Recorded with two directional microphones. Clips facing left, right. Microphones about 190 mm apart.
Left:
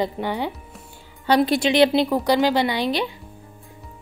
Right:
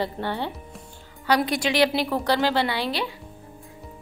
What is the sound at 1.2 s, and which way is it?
A woman's voice, 25° left (ahead or behind).